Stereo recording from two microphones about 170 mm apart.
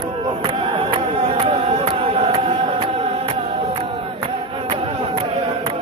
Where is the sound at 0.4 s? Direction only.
30° right (ahead or behind).